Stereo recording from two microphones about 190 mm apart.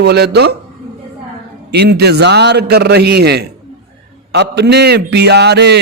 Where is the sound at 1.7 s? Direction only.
60° right (ahead or behind).